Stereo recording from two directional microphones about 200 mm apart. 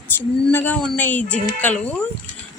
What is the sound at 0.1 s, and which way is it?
Female singing, 10° left (ahead or behind).